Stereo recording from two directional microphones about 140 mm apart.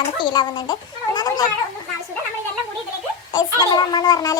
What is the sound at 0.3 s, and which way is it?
Speech, 35° left (ahead or behind).